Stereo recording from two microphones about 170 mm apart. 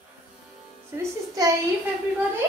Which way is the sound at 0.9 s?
20° right (ahead or behind).